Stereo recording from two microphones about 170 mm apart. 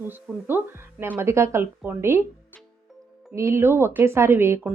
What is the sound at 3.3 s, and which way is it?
Speech, 15° right (ahead or behind).